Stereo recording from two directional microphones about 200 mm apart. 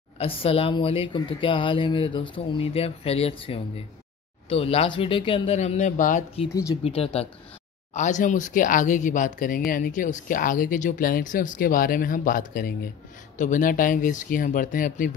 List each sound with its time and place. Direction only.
0.2 s speech: 30° left (ahead or behind)
6.5 s speech: 15° left (ahead or behind)
6.8 s speech: 30° left (ahead or behind)